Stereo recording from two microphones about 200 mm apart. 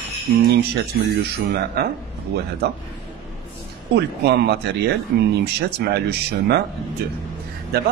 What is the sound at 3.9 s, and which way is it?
A man's voice, 55° right (ahead or behind).